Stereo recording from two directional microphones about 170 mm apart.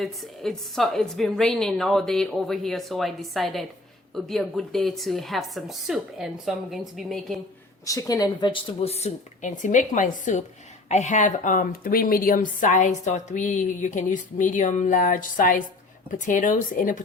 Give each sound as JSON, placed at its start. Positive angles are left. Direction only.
{"t": 0.0, "sound": "a woman's voice", "side_deg": 0}
{"t": 7.9, "sound": "speech", "side_deg": 20}